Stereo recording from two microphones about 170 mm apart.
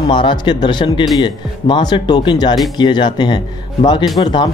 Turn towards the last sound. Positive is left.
turn(degrees=25)  # may be behind; listen again after turning